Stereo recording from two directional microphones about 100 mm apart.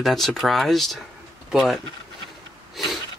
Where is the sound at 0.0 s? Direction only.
Centre (ahead or behind).